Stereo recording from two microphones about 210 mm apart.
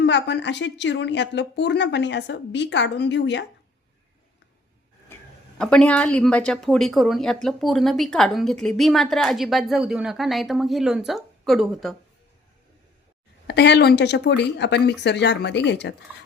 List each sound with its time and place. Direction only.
0.0 s a woman's voice: 55° left (ahead or behind)
5.5 s a woman's voice: 5° left (ahead or behind)
13.5 s a woman's voice: 55° left (ahead or behind)